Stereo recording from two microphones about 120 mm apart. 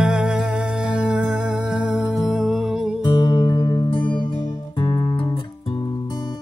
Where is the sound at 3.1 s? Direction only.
35° left (ahead or behind).